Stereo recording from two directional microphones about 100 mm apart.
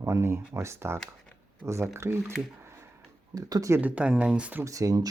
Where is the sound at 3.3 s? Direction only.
35° right (ahead or behind).